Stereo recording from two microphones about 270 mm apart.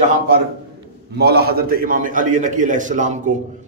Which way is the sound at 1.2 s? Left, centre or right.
Right.